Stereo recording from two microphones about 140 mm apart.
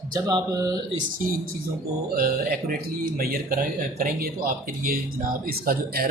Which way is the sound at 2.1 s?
90° right.